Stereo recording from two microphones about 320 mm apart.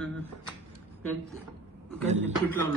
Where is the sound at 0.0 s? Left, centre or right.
Centre.